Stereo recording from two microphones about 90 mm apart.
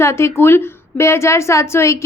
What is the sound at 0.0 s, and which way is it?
A woman's voice, 30° left (ahead or behind).